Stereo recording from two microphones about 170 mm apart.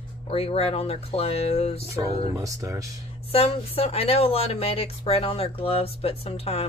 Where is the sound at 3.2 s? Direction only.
35° left (ahead or behind).